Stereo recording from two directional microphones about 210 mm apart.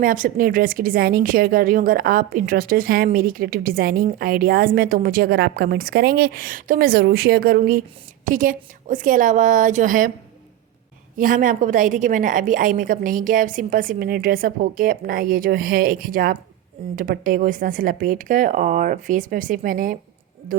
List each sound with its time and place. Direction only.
0.0 s a woman's voice: 40° right (ahead or behind)
11.2 s a woman's voice: 40° right (ahead or behind)